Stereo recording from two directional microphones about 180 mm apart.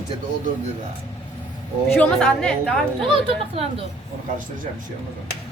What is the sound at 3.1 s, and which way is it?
Speech, 30° right (ahead or behind).